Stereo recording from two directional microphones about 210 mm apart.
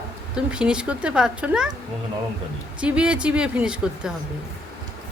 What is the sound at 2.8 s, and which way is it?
A woman's voice, 5° right (ahead or behind).